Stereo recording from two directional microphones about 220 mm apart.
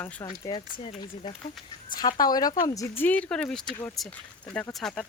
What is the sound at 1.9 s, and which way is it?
Speech, 20° left (ahead or behind).